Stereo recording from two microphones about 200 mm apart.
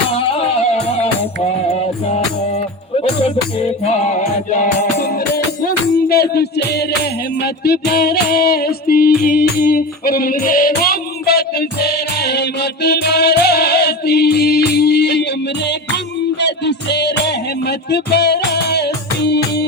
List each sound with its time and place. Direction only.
0.1 s music: 30° left (ahead or behind)
3.0 s music: 30° left (ahead or behind); by 15.2 s 55° left (ahead or behind)
16.4 s music: 60° left (ahead or behind)